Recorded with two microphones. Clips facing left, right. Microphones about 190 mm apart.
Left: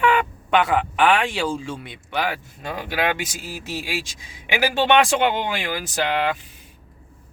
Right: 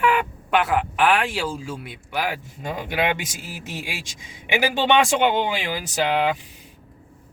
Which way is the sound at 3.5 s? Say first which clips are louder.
Left 6 dB; 20° right (ahead or behind).